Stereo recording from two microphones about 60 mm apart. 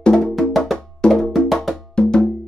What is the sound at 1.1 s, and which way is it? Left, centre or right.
Wood block, centre.